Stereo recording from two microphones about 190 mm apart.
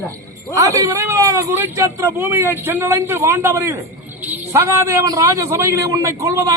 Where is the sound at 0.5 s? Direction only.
15° right (ahead or behind).